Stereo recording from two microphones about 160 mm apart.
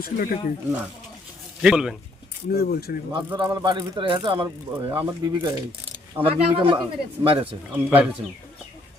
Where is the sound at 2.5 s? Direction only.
75° left (ahead or behind).